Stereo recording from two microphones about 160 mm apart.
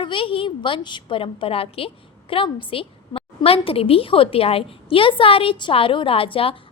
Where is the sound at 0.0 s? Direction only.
30° left (ahead or behind).